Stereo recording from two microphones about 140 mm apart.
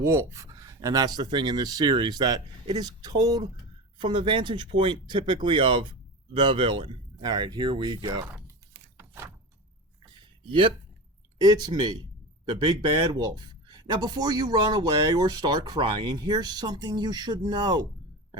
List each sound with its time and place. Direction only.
0.0 s speech: 20° right (ahead or behind)
9.0 s door: 20° right (ahead or behind)
11.3 s speech: 30° right (ahead or behind)